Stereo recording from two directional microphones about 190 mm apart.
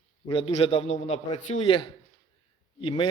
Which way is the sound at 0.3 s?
30° left (ahead or behind).